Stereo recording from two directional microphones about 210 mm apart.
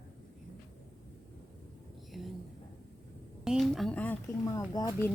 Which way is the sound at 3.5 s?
Centre (ahead or behind).